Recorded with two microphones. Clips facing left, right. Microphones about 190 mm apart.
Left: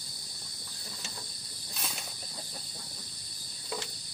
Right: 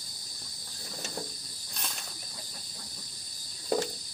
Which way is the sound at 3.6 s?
45° right (ahead or behind).